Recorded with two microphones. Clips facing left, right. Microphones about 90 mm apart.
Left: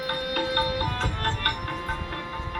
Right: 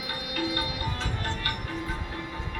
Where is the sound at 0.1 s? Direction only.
50° left (ahead or behind).